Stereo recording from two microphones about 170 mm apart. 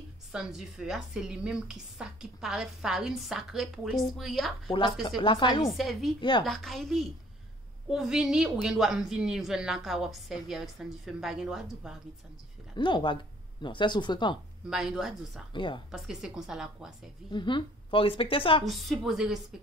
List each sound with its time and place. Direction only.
0.3 s a woman's voice: centre (ahead or behind)
5.0 s speech: 30° left (ahead or behind)
5.8 s a woman's voice: centre (ahead or behind)
12.7 s speech: 30° left (ahead or behind)
14.7 s a woman's voice: 5° right (ahead or behind)
15.5 s speech: 30° left (ahead or behind)
15.9 s a woman's voice: 5° right (ahead or behind)
17.3 s a woman's voice: 25° left (ahead or behind)
18.7 s a woman's voice: centre (ahead or behind)